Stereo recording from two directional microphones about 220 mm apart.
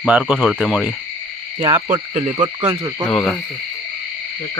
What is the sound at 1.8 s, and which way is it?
Frog, 30° right (ahead or behind).